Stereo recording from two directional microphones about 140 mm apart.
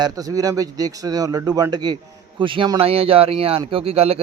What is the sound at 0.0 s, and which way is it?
A man's voice, 25° right (ahead or behind).